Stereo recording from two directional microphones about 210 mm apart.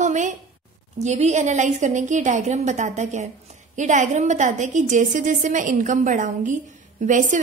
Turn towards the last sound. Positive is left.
turn(degrees=-35)  # may be behind; listen again after turning